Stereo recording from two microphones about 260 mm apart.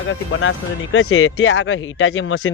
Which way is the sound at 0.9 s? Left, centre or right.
Left.